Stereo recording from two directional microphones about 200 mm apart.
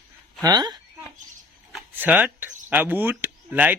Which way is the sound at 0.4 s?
20° right (ahead or behind).